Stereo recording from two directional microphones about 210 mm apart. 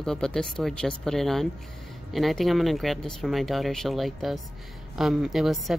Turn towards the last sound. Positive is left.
turn(degrees=0)  # may be behind; listen again after turning